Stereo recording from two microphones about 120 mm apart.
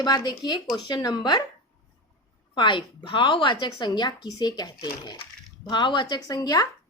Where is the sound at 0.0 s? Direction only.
35° left (ahead or behind).